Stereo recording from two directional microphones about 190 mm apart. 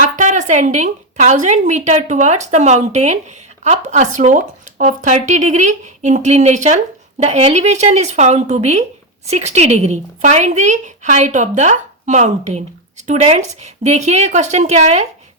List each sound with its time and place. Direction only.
0.0 s a woman's voice: 40° right (ahead or behind)